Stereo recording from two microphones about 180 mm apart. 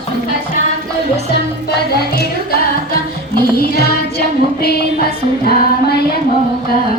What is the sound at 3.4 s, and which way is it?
Music, 55° left (ahead or behind).